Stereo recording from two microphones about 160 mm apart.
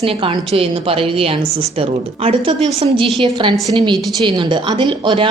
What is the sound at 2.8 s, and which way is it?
Speech, 30° right (ahead or behind).